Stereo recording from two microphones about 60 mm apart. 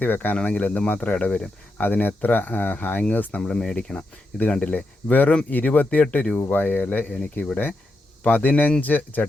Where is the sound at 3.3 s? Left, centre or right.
Centre.